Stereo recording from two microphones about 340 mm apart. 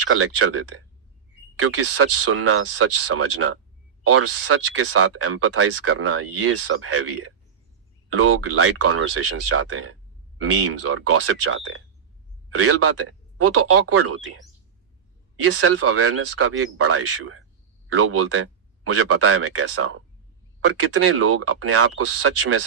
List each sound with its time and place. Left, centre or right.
0.0 s speech: right
15.4 s speech: right